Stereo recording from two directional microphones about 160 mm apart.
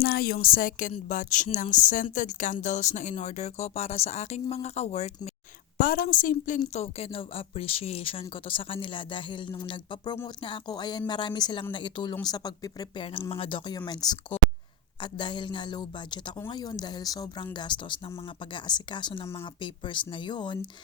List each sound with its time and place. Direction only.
0.0 s a woman's voice: 75° left (ahead or behind); by 5.3 s 45° left (ahead or behind)
5.7 s a woman's voice: 60° left (ahead or behind); by 20.7 s 30° left (ahead or behind)